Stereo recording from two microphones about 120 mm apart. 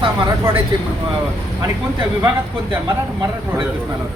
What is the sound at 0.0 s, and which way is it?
Speech, 40° right (ahead or behind).